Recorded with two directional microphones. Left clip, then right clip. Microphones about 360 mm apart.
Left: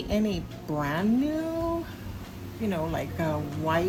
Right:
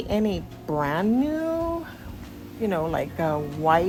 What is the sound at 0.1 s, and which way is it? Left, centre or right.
A woman's voice, centre.